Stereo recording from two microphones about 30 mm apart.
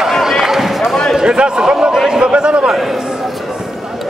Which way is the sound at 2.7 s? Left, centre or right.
Centre.